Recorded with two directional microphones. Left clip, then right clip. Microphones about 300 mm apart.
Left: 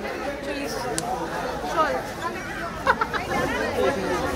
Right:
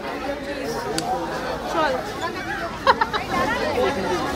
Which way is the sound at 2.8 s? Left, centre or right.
Right.